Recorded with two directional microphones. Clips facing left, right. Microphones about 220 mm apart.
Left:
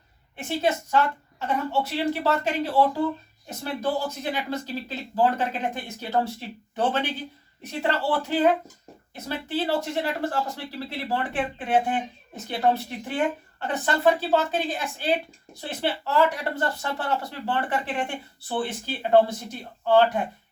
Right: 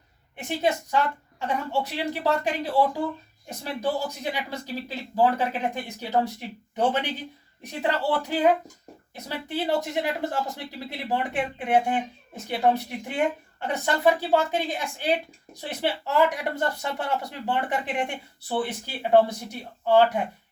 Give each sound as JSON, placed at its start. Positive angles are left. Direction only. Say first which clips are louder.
{"t": 0.4, "sound": "speech", "louder": "even", "side_deg": -15}
{"t": 7.6, "sound": "speech", "louder": "even", "side_deg": -15}